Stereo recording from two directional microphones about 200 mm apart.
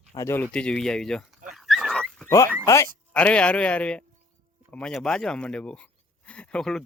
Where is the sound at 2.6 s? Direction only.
15° left (ahead or behind).